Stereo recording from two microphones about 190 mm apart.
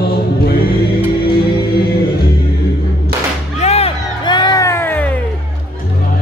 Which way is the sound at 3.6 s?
35° left (ahead or behind).